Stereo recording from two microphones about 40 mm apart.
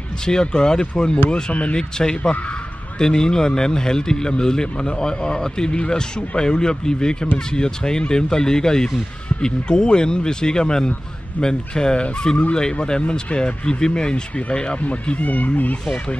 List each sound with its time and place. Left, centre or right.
0.2 s a man's voice: centre
1.5 s speech: left
1.8 s a man's voice: centre
14.8 s speech: left